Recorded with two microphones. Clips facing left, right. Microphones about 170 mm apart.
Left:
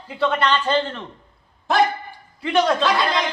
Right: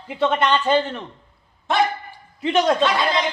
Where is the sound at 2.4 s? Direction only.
20° right (ahead or behind).